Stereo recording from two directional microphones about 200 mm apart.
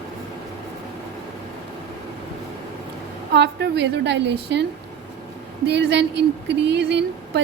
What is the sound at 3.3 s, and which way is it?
Speech, 55° right (ahead or behind).